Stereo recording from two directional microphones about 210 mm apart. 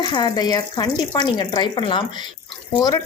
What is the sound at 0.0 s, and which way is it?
Speech, 20° left (ahead or behind).